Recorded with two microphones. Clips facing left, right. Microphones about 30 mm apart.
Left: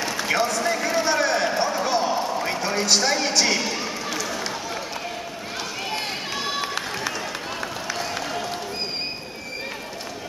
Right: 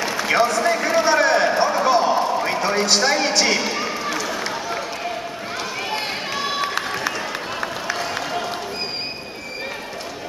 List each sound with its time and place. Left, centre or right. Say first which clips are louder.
0.0 s a sound: right 4 dB; centre
5.9 s run: right 2 dB; centre
7.6 s applause: right 4 dB; centre